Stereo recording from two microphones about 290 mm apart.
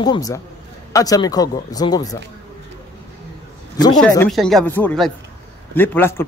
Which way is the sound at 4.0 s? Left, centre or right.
Centre.